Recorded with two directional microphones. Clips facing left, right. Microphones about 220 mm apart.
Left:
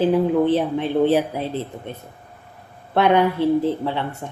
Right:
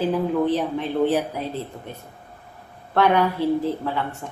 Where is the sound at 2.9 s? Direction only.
20° left (ahead or behind).